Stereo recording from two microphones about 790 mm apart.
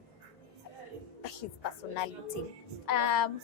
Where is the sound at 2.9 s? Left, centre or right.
Left.